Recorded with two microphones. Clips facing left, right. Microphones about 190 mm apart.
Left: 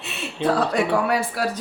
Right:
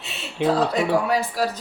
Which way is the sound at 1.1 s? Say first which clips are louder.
Even; 60° left (ahead or behind).